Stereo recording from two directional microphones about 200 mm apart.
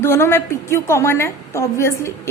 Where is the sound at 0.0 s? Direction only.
10° left (ahead or behind).